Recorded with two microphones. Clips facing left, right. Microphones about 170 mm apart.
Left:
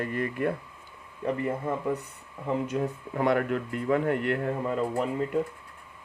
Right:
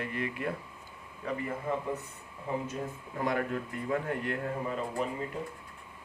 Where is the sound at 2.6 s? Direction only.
70° left (ahead or behind).